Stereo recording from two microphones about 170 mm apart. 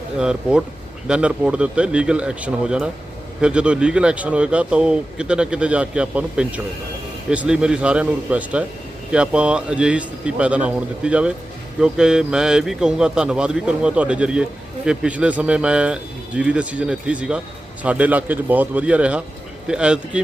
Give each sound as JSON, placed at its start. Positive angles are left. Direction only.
{"t": 0.2, "sound": "a man's voice", "side_deg": -5}